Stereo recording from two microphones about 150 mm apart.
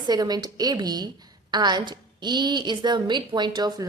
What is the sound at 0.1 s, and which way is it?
A woman's voice, 25° right (ahead or behind).